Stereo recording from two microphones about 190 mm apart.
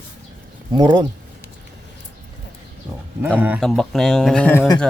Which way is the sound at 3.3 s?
10° right (ahead or behind).